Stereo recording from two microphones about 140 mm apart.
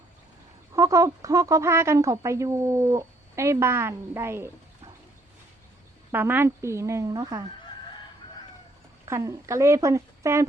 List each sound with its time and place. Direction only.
0.7 s speech: 20° right (ahead or behind)
6.1 s speech: 15° right (ahead or behind)
7.6 s chicken: 35° left (ahead or behind)
9.0 s speech: 20° right (ahead or behind)